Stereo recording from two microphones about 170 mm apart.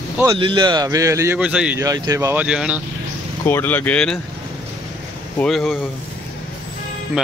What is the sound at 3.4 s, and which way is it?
Speech, 10° left (ahead or behind).